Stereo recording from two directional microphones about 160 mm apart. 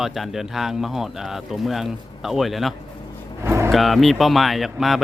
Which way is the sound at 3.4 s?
15° right (ahead or behind).